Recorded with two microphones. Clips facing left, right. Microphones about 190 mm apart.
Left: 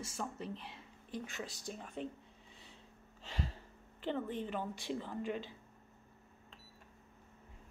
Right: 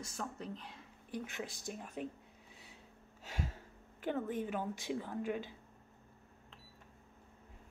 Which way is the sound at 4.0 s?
10° right (ahead or behind).